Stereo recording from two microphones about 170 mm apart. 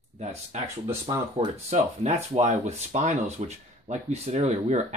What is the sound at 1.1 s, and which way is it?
Speech, 25° right (ahead or behind).